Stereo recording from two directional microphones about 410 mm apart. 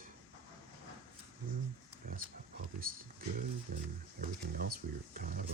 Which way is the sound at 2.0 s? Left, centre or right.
Right.